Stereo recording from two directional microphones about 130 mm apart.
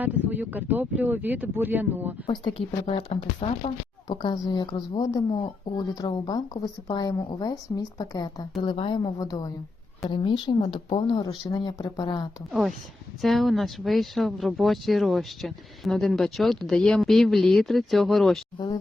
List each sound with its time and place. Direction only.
0.0 s speech: 15° right (ahead or behind)
2.2 s speech: 45° left (ahead or behind)
4.1 s a woman's voice: 35° left (ahead or behind)
12.5 s speech: centre (ahead or behind)